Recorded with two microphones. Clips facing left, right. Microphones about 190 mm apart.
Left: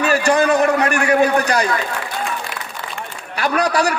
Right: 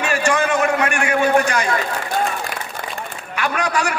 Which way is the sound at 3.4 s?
35° left (ahead or behind).